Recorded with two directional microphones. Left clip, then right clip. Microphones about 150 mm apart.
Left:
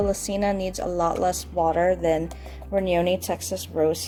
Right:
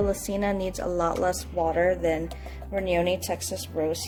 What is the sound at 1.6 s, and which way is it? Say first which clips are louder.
A woman's voice: left 3 dB; 50° left (ahead or behind).